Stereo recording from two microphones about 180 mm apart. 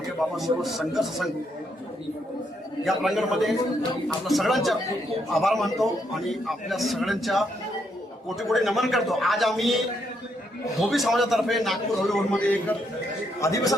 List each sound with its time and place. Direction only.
0.2 s a man's voice: centre (ahead or behind)
2.8 s a man's voice: centre (ahead or behind)
13.4 s a man's voice: 15° left (ahead or behind)